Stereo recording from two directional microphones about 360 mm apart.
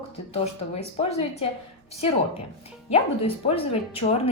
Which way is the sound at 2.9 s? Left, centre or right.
Centre.